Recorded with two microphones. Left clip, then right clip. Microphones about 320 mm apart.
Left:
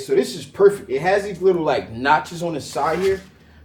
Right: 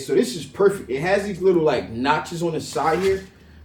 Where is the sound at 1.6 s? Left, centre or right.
Left.